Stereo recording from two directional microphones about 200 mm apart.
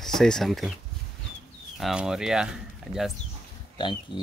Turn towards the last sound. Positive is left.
turn(degrees=20)  # may be behind; listen again after turning